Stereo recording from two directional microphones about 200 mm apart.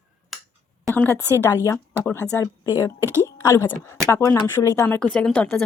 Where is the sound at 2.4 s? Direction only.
15° left (ahead or behind).